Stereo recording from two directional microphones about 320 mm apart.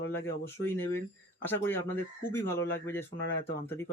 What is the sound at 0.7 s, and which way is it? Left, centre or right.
Speech, centre.